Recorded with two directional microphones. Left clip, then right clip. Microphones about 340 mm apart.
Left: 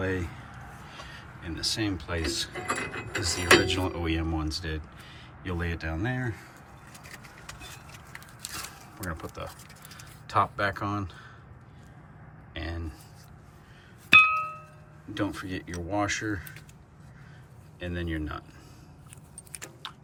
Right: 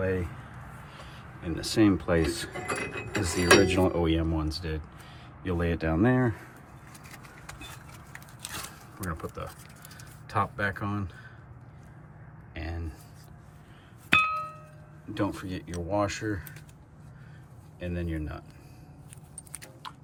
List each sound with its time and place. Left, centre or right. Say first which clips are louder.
0.0 s speech: right 1 dB; centre
1.4 s speech: right 5 dB; centre
2.6 s speech: left 1 dB; centre
6.9 s vehicle: left 2 dB; centre
8.6 s a sound: even; centre
12.5 s a sound: left 2 dB; centre
14.1 s music: left 6 dB; centre
15.1 s speech: even; centre
17.7 s speech: left 1 dB; centre